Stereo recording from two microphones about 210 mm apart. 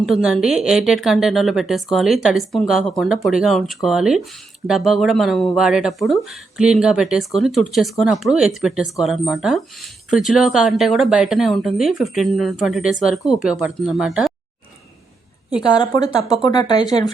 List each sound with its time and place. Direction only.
0.0 s speech: 5° right (ahead or behind)
15.7 s speech: 20° left (ahead or behind)